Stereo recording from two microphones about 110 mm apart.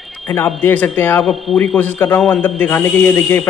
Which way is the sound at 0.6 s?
15° left (ahead or behind).